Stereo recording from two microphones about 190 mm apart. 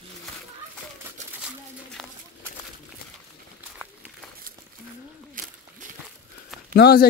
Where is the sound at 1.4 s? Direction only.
Centre (ahead or behind).